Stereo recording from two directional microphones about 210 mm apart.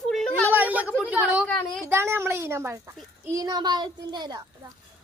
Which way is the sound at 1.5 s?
5° left (ahead or behind).